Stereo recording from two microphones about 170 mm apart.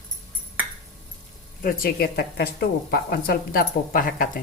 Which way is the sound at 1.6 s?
55° left (ahead or behind).